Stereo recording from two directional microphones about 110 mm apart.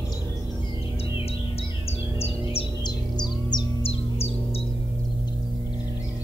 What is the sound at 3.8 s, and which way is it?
Chirp, 65° left (ahead or behind).